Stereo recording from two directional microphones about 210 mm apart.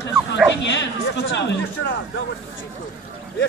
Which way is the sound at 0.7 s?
60° left (ahead or behind).